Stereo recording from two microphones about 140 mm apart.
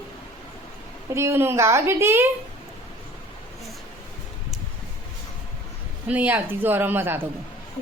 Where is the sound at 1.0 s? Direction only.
20° right (ahead or behind).